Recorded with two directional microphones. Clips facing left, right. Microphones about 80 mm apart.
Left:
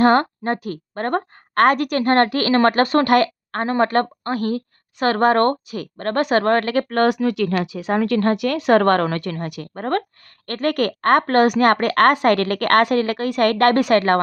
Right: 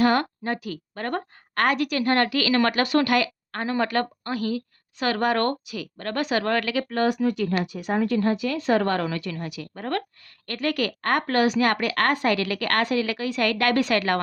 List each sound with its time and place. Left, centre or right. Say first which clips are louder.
0.0 s a woman's voice: left 6 dB; left